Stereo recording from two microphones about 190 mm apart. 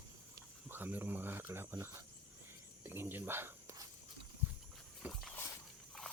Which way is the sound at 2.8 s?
10° right (ahead or behind).